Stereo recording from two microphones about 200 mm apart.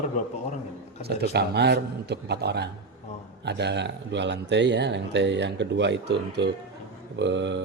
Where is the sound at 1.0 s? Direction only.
55° right (ahead or behind).